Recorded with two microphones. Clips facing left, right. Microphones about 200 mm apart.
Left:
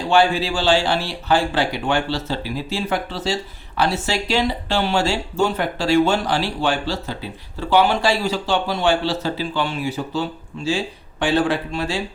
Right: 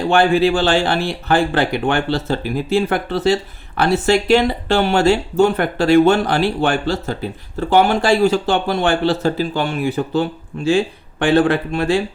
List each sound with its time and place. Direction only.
0.1 s speech: 55° right (ahead or behind)